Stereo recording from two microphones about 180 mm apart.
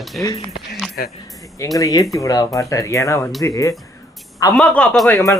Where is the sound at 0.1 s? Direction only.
5° left (ahead or behind).